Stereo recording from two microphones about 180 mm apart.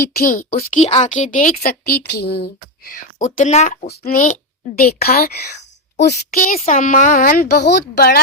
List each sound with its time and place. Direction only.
0.0 s a woman's voice: 55° left (ahead or behind)
3.8 s a woman's voice: 60° left (ahead or behind)